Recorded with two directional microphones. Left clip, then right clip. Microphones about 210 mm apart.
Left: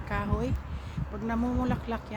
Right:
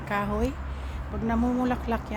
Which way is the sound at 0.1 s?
Centre (ahead or behind).